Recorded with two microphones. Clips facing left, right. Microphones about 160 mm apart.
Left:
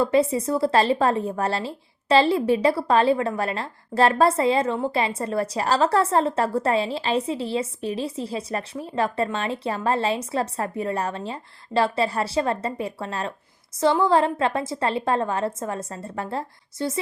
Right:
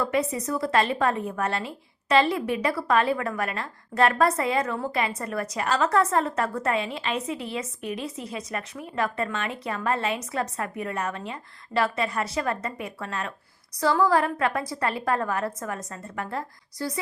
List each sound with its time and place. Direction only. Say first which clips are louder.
0.0 s a woman's voice: left 6 dB; 30° left (ahead or behind)